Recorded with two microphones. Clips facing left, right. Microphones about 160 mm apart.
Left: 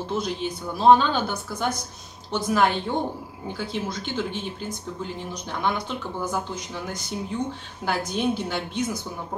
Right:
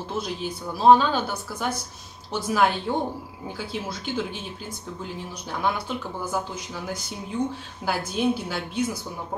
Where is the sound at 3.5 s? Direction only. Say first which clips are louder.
Left 3 dB; 5° right (ahead or behind).